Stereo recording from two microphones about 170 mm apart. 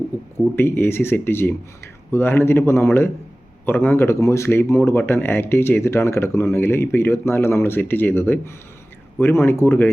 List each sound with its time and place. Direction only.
0.3 s speech: 15° left (ahead or behind)